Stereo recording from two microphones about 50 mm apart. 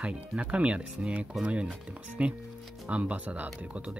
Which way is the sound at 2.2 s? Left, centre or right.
Right.